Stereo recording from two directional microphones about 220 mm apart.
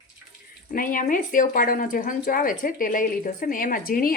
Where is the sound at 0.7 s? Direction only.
40° left (ahead or behind).